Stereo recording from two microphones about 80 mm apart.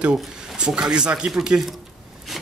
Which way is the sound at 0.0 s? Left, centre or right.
Centre.